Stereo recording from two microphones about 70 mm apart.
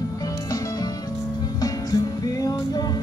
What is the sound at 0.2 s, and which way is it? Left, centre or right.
Music, left.